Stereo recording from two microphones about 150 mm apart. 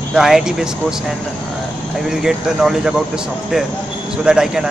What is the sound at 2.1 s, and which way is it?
Speech, 5° right (ahead or behind).